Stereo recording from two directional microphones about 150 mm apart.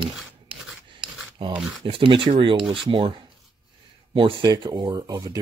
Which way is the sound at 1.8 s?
35° right (ahead or behind).